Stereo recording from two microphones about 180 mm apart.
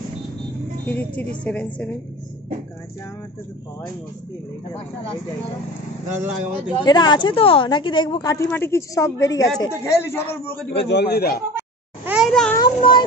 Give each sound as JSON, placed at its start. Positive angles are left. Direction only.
{"t": 0.8, "sound": "a woman's voice", "side_deg": 10}
{"t": 6.0, "sound": "speech", "side_deg": -15}
{"t": 6.8, "sound": "a woman's voice", "side_deg": 25}
{"t": 8.5, "sound": "a woman's voice", "side_deg": 15}
{"t": 10.7, "sound": "a man's voice", "side_deg": 70}
{"t": 12.1, "sound": "a sound", "side_deg": 0}
{"t": 12.5, "sound": "a sound", "side_deg": 25}